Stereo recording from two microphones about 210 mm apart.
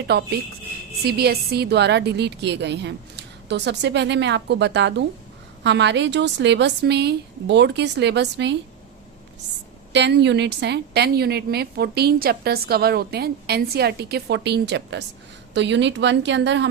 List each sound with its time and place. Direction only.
0.1 s a woman's voice: 50° right (ahead or behind)
9.9 s a woman's voice: 55° right (ahead or behind)